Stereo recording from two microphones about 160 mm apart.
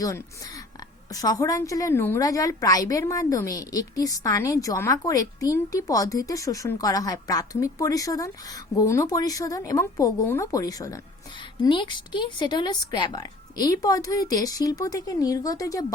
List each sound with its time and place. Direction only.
0.0 s a woman's voice: 20° left (ahead or behind)